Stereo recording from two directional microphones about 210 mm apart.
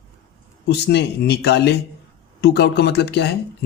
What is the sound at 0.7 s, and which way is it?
Speech, 55° left (ahead or behind).